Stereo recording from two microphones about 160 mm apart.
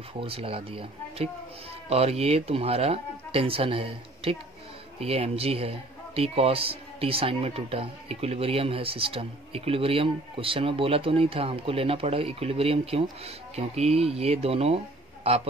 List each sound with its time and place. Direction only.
0.2 s a man's voice: 35° right (ahead or behind)